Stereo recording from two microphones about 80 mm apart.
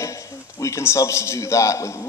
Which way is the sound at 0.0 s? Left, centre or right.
Left.